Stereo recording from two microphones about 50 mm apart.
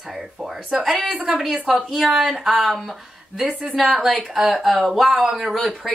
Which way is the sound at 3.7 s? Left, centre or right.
Centre.